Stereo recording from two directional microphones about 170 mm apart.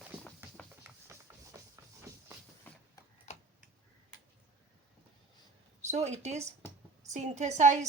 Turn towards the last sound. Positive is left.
turn(degrees=-45)  # may be behind; listen again after turning